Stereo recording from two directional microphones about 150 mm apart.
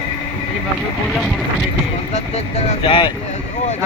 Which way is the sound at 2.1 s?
50° left (ahead or behind).